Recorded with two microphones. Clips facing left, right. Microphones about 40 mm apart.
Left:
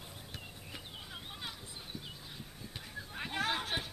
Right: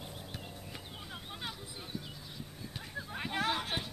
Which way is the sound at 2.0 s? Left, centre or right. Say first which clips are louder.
Right 1 dB; centre.